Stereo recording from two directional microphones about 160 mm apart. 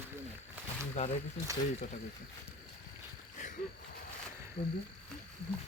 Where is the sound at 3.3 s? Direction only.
50° left (ahead or behind).